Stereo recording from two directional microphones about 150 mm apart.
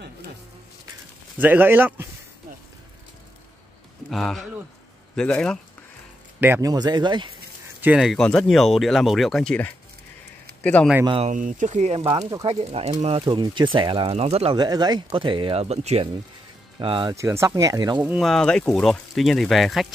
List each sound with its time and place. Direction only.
1.4 s speech: 10° right (ahead or behind)
4.1 s speech: centre (ahead or behind)
6.4 s speech: 15° right (ahead or behind)
6.7 s speech: 30° right (ahead or behind)
7.8 s speech: 5° right (ahead or behind)
11.2 s speech: 60° right (ahead or behind); by 12.2 s 40° right (ahead or behind)
12.2 s speech: 25° right (ahead or behind)
12.4 s speech: 40° right (ahead or behind)
13.2 s speech: 30° right (ahead or behind)
14.6 s speech: 25° right (ahead or behind); by 16.1 s 45° right (ahead or behind)
16.8 s speech: 35° right (ahead or behind)
17.1 s speech: 20° right (ahead or behind)
18.0 s speech: centre (ahead or behind)